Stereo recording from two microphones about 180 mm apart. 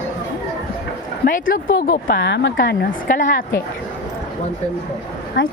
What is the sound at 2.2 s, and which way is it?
A woman's voice, 90° left.